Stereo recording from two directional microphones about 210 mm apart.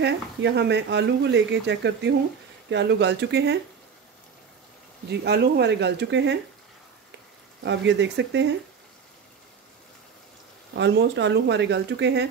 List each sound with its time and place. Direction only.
0.0 s speech: 55° right (ahead or behind)
5.2 s speech: 50° right (ahead or behind)
7.6 s speech: 60° right (ahead or behind)
10.7 s speech: 55° right (ahead or behind)